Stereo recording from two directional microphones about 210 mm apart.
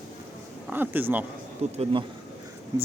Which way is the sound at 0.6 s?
10° right (ahead or behind).